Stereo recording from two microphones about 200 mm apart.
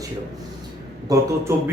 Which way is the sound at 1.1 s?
20° right (ahead or behind).